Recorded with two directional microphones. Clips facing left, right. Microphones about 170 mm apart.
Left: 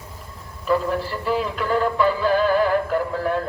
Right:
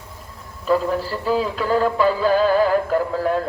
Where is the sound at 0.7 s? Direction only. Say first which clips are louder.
Right 2 dB; 35° right (ahead or behind).